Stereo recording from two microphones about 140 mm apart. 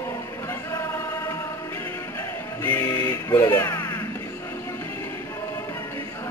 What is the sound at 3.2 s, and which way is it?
Speech, 25° left (ahead or behind).